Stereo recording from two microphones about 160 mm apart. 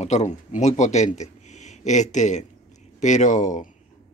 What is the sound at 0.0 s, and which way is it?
A man's voice, 45° left (ahead or behind).